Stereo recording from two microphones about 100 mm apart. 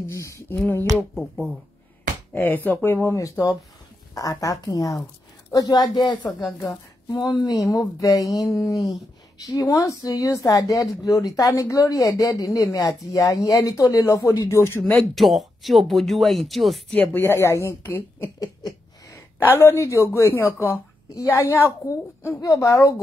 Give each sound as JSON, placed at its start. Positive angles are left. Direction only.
{"t": 0.0, "sound": "speech", "side_deg": 30}
{"t": 0.6, "sound": "a woman's voice", "side_deg": 20}
{"t": 2.3, "sound": "a woman's voice", "side_deg": 20}
{"t": 14.8, "sound": "speech", "side_deg": 5}
{"t": 16.9, "sound": "a woman's voice", "side_deg": 20}
{"t": 19.6, "sound": "a woman's voice", "side_deg": 30}